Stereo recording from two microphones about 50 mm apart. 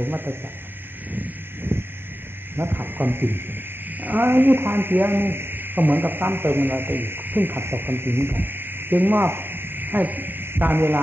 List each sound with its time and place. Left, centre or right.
0.0 s a man's voice: right
1.7 s a sound: right
2.5 s a man's voice: right